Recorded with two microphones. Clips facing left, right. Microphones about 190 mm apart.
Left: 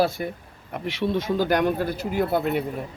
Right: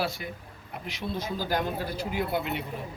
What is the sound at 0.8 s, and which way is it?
Speech, 70° left (ahead or behind).